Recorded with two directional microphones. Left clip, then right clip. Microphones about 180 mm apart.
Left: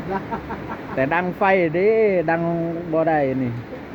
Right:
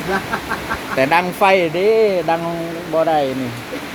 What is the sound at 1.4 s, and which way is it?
Speech, 5° right (ahead or behind).